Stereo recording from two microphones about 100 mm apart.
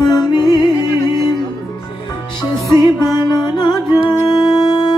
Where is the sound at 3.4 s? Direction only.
45° left (ahead or behind).